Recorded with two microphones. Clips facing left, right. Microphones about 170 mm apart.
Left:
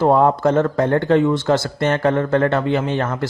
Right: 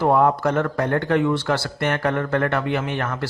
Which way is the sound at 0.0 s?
25° left (ahead or behind).